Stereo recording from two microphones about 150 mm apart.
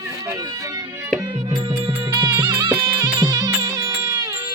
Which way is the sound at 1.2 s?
25° right (ahead or behind).